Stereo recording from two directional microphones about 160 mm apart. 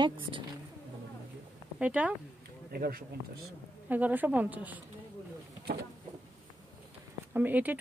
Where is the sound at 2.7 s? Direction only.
75° right (ahead or behind).